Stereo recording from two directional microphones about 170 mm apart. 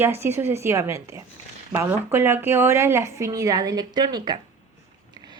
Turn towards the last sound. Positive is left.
turn(degrees=-25)  # may be behind; listen again after turning